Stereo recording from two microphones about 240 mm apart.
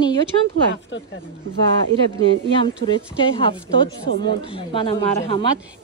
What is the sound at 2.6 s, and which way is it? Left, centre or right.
A woman's voice, left.